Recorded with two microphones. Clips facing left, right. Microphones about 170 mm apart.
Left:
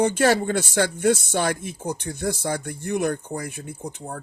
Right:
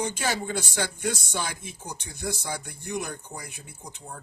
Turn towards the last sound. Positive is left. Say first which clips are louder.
# left 9 dB
turn(degrees=55)  # may be behind; listen again after turning